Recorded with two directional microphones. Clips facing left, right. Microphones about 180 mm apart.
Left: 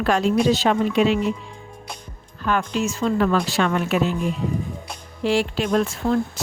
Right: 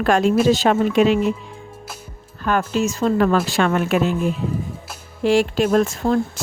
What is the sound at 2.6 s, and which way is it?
Speech, 5° right (ahead or behind).